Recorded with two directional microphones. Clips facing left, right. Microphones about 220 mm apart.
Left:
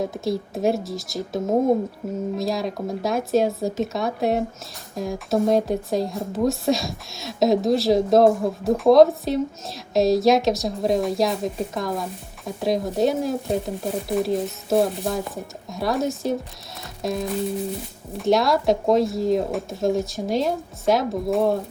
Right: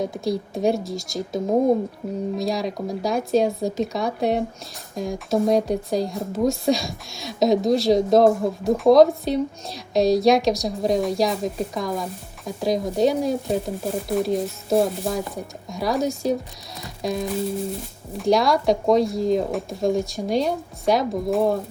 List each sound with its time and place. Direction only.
0.0 s speech: centre (ahead or behind)